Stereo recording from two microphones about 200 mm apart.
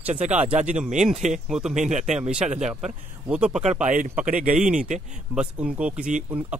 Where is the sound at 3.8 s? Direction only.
40° right (ahead or behind).